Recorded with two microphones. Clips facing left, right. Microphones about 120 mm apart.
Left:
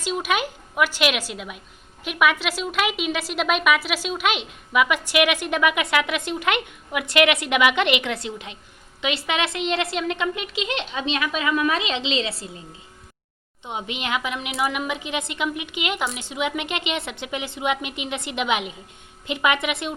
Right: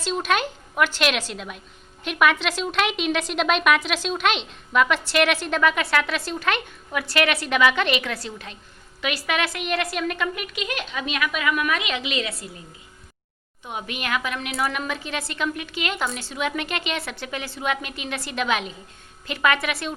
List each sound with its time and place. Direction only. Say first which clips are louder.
0.0 s a woman's voice: right 1 dB; 10° left (ahead or behind); by 12.5 s 30° left (ahead or behind)
13.7 s a woman's voice: left 1 dB; 20° left (ahead or behind)